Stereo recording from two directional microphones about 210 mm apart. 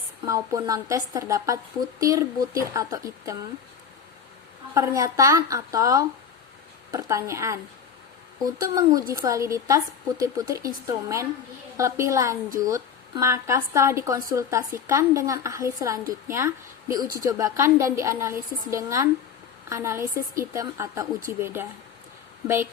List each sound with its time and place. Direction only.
0.3 s a woman's voice: 15° right (ahead or behind)
4.9 s a woman's voice: 15° right (ahead or behind)